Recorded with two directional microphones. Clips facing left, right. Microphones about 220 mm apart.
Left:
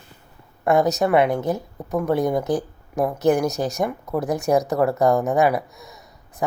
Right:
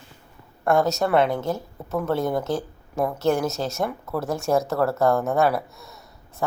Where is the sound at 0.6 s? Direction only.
20° left (ahead or behind).